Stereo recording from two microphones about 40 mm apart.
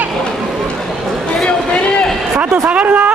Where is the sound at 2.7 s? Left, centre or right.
Right.